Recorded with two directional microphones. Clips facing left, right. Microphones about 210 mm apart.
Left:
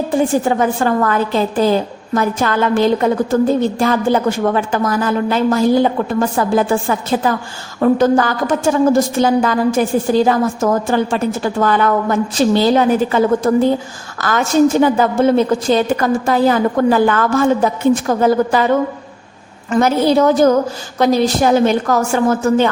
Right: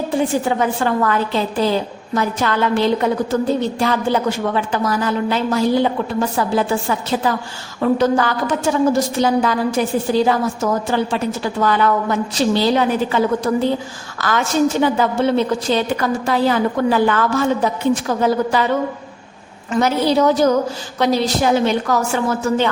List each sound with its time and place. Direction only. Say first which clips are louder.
0.4 s a woman's voice: left 3 dB; 45° left (ahead or behind)
19.7 s a woman's voice: left 3 dB; 50° left (ahead or behind)